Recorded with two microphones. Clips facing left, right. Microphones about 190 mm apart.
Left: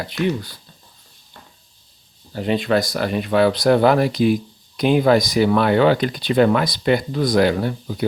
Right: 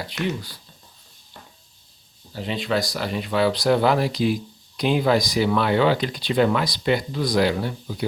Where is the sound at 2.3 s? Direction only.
55° left (ahead or behind).